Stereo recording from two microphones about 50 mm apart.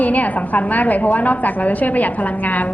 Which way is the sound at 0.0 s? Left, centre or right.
Left.